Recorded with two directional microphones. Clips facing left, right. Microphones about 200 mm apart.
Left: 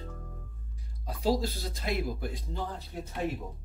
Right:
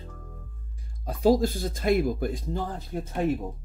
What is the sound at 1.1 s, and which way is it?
Speech, 50° right (ahead or behind).